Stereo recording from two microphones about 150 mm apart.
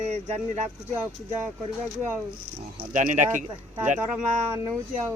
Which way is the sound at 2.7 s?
55° right (ahead or behind).